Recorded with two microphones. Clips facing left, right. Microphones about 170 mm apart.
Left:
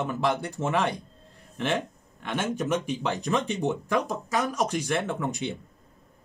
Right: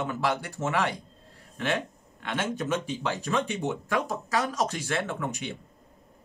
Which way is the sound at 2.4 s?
15° left (ahead or behind).